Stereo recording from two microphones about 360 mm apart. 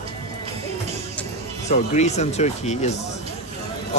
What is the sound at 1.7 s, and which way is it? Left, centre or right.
A man's voice, centre.